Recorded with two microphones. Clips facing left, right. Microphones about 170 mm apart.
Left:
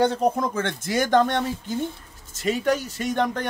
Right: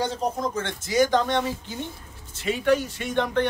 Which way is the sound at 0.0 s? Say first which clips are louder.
Left 5 dB; 60° left (ahead or behind).